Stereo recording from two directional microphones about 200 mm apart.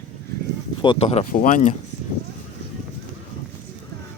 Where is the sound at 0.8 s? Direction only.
25° left (ahead or behind).